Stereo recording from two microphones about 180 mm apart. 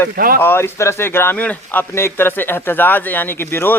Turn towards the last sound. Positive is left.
turn(degrees=10)  # may be behind; listen again after turning